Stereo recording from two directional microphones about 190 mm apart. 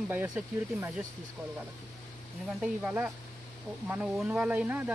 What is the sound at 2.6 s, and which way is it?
Speech, 10° right (ahead or behind).